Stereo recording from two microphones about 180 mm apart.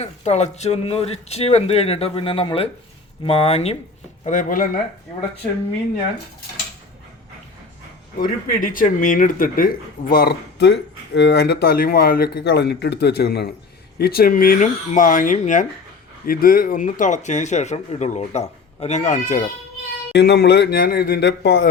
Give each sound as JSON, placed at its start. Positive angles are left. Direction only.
{"t": 0.0, "sound": "speech", "side_deg": 40}
{"t": 4.3, "sound": "speech", "side_deg": 50}
{"t": 8.2, "sound": "speech", "side_deg": 50}
{"t": 20.1, "sound": "speech", "side_deg": 65}